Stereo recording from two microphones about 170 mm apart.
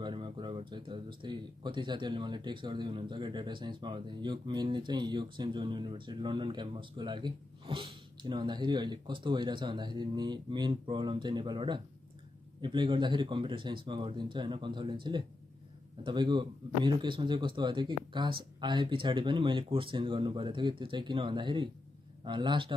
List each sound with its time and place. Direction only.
0.0 s speech: 30° right (ahead or behind)